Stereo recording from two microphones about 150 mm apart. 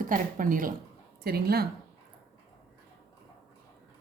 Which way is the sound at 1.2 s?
90° right.